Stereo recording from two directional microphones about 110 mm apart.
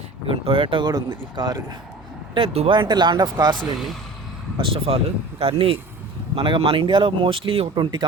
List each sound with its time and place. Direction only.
0.3 s speech: 55° right (ahead or behind); by 1.6 s 40° right (ahead or behind)
2.3 s speech: 60° right (ahead or behind)
2.7 s speech: 45° right (ahead or behind)
4.5 s speech: 55° right (ahead or behind)